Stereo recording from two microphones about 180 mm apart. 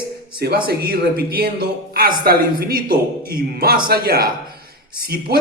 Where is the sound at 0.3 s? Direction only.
60° right (ahead or behind).